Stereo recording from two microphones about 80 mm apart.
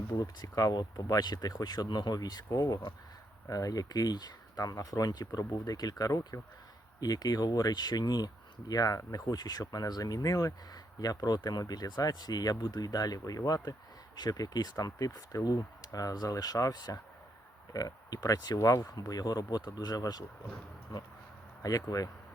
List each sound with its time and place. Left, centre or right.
0.1 s speech: left
7.0 s speech: left
18.8 s speech: left